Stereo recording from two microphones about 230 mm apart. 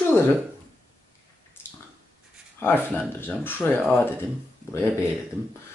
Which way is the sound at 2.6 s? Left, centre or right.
Centre.